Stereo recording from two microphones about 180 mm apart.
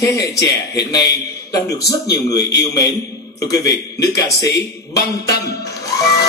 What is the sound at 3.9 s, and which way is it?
Speech, 20° left (ahead or behind).